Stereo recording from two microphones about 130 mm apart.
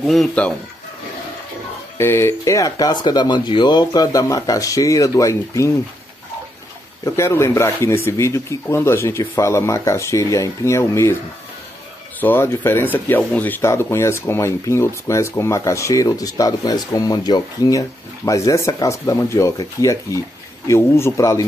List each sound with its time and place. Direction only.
0.0 s speech: centre (ahead or behind)
2.0 s speech: 20° left (ahead or behind)
7.1 s speech: 20° left (ahead or behind)
12.2 s speech: 15° left (ahead or behind)